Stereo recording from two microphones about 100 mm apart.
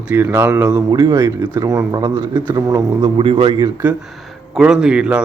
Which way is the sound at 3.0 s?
60° right (ahead or behind).